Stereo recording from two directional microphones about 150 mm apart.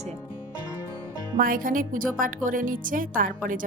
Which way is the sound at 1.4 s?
70° right (ahead or behind).